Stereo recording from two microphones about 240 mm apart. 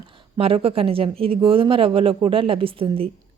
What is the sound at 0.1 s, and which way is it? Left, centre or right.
A woman's voice, right.